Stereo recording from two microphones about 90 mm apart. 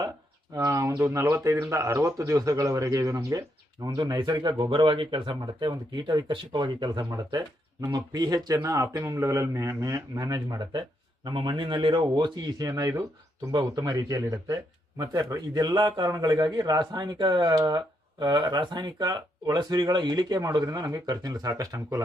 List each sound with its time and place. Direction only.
0.5 s a sound: 40° right (ahead or behind)
1.1 s a man's voice: 30° right (ahead or behind)
3.9 s speech: 55° right (ahead or behind)
7.9 s speech: 45° right (ahead or behind)
12.9 s speech: 30° right (ahead or behind)
13.5 s speech: 45° right (ahead or behind)